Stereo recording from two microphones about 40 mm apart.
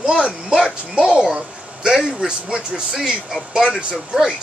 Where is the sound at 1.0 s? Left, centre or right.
Right.